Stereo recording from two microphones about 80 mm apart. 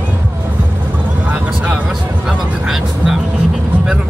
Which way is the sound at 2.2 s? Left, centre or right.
Centre.